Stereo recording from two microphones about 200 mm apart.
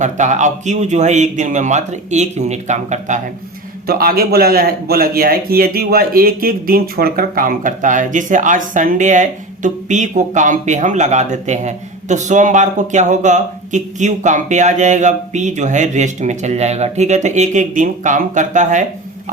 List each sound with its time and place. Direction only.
0.0 s a man's voice: 35° right (ahead or behind)
3.8 s a man's voice: 50° right (ahead or behind)